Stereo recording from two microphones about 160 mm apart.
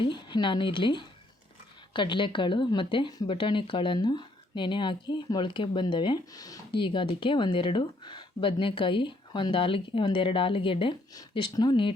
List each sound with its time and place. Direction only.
0.0 s speech: 30° left (ahead or behind)